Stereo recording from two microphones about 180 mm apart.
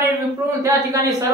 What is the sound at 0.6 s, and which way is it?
Speech, 15° right (ahead or behind).